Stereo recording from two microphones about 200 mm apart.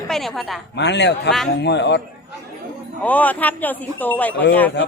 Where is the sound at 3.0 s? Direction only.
10° left (ahead or behind).